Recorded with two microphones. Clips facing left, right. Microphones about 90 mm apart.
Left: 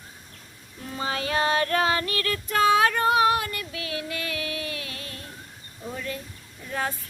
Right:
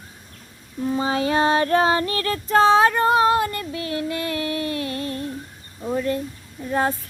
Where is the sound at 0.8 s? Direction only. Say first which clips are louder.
Right 8 dB; 25° right (ahead or behind); by 5.2 s 40° right (ahead or behind).